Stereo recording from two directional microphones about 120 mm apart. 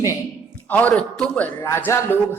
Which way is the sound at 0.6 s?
15° left (ahead or behind).